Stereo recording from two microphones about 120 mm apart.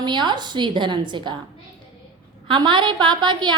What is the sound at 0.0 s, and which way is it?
A woman's voice, 40° right (ahead or behind).